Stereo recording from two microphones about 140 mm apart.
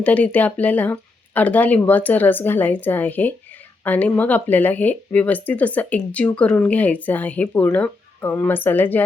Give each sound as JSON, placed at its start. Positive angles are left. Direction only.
{"t": 0.0, "sound": "speech", "side_deg": 10}